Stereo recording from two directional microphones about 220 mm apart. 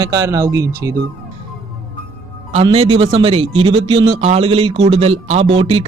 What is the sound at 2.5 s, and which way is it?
Speech, 30° right (ahead or behind).